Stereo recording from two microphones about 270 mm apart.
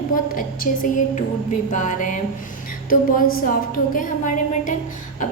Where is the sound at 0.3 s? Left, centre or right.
Left.